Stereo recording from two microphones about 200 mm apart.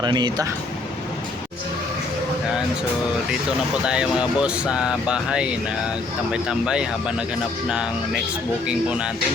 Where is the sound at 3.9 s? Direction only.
5° right (ahead or behind).